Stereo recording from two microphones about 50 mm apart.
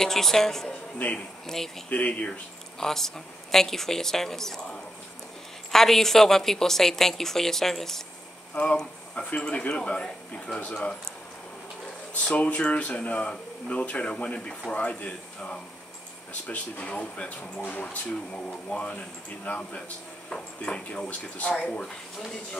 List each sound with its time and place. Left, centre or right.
0.0 s speech: centre
0.9 s speech: left
2.8 s speech: centre
8.7 s speech: left
12.1 s speech: left